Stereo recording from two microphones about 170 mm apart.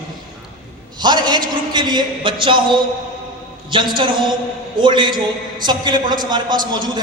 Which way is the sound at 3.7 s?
30° right (ahead or behind).